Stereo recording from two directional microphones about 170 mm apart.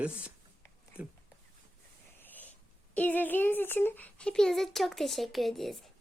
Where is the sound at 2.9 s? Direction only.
10° left (ahead or behind).